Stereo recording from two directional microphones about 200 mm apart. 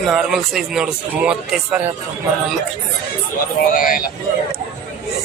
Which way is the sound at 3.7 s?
45° left (ahead or behind).